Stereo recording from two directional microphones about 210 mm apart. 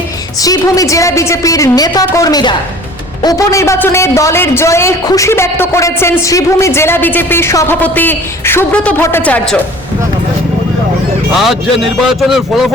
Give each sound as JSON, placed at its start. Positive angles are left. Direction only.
{"t": 0.4, "sound": "a woman's voice", "side_deg": 15}
{"t": 11.3, "sound": "speech", "side_deg": 0}